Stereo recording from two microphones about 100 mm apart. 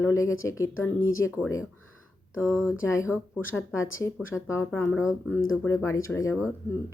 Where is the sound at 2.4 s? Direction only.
30° left (ahead or behind).